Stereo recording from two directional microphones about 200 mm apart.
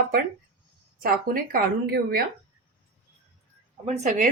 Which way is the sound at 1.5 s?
50° right (ahead or behind).